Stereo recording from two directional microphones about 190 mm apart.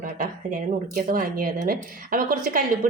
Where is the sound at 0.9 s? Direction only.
50° right (ahead or behind).